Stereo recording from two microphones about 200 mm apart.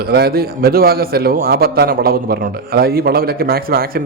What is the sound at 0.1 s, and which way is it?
A man's voice, 50° right (ahead or behind).